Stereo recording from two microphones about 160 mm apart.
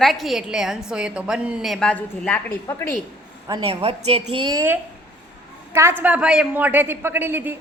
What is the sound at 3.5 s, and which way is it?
A woman's voice, 35° right (ahead or behind).